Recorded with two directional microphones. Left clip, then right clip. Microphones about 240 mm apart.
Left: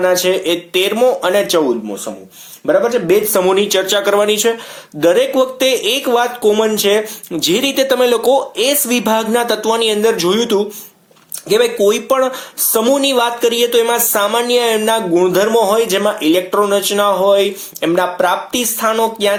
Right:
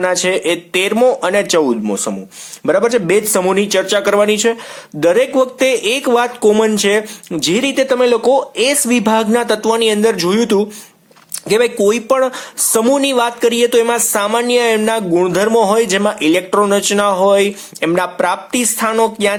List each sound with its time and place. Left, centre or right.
0.0 s speech: right
7.4 s speech: centre